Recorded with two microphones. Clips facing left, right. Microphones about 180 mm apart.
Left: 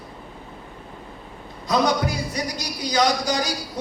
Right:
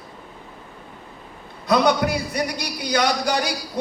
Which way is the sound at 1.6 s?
60° right (ahead or behind).